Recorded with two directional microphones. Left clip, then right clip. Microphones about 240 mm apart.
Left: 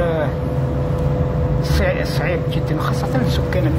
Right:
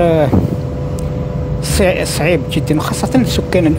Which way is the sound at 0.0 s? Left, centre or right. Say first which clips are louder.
Right 8 dB; right.